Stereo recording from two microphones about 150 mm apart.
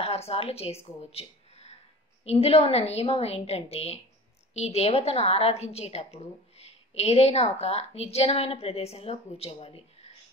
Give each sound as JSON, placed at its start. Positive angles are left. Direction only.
{"t": 0.0, "sound": "a woman's voice", "side_deg": 45}
{"t": 0.8, "sound": "a sound", "side_deg": 45}
{"t": 2.2, "sound": "a woman's voice", "side_deg": 40}